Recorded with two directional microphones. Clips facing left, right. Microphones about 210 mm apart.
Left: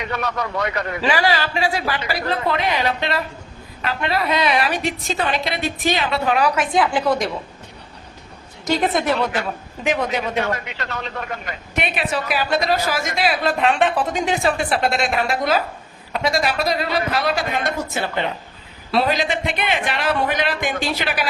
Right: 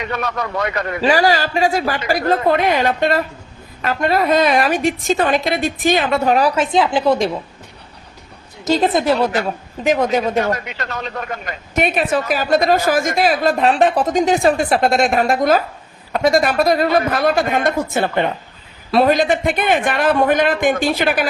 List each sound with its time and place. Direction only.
0.6 s a woman's voice: 45° right (ahead or behind); by 7.3 s 25° right (ahead or behind)
8.6 s a woman's voice: 25° right (ahead or behind); by 21.2 s 50° right (ahead or behind)